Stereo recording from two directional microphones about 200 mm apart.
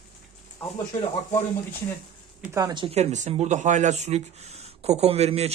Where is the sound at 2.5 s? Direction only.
20° right (ahead or behind).